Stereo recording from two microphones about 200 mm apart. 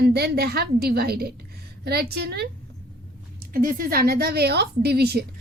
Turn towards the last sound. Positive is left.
turn(degrees=-50)  # may be behind; listen again after turning